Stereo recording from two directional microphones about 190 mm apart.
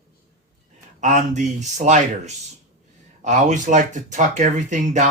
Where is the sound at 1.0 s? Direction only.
40° right (ahead or behind).